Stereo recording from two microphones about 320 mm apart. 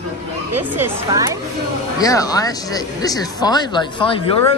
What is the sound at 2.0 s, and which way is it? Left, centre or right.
Speech, centre.